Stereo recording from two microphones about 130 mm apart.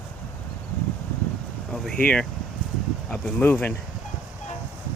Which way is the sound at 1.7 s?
5° left (ahead or behind).